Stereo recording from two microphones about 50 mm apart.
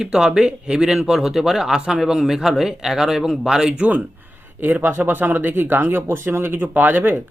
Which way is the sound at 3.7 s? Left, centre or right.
Right.